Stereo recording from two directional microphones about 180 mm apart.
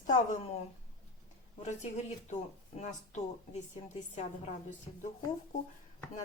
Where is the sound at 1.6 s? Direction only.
40° left (ahead or behind).